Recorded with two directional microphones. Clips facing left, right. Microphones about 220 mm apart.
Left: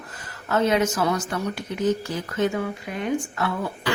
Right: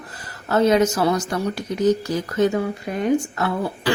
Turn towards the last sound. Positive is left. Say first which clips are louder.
# right 3 dB
turn(degrees=-35)  # may be behind; listen again after turning